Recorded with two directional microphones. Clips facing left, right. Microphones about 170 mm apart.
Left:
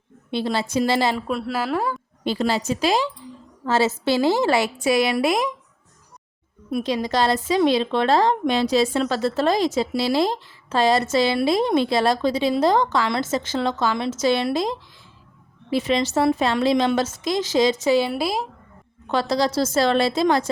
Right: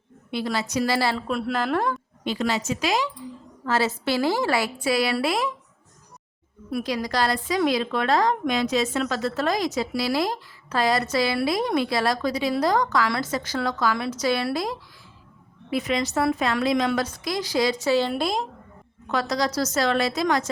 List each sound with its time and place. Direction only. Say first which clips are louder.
0.3 s a woman's voice: left 3 dB; 25° left (ahead or behind)
1.3 s a woman's voice: left 1 dB; centre (ahead or behind)
2.2 s a woman's voice: left 3 dB; 35° left (ahead or behind)
6.7 s a woman's voice: left 3 dB; 25° left (ahead or behind); by 18.4 s 5° left (ahead or behind)
19.0 s a woman's voice: left 4 dB; 30° left (ahead or behind)